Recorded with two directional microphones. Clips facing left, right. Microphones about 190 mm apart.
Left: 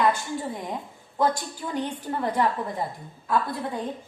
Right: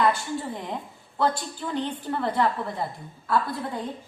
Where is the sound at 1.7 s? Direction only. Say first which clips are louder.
Even; 10° left (ahead or behind).